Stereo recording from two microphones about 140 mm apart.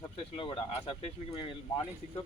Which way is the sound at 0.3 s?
40° left (ahead or behind).